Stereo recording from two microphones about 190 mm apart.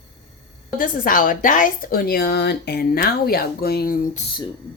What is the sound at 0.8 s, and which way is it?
A woman's voice, 45° left (ahead or behind).